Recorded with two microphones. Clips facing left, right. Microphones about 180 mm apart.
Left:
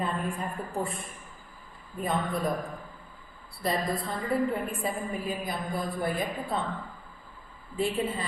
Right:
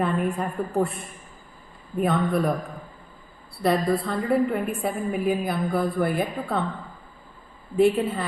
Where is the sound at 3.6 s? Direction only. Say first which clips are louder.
Right 7 dB; 65° right (ahead or behind).